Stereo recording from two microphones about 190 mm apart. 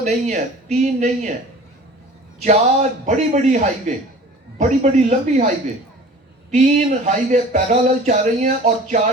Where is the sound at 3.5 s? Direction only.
40° right (ahead or behind).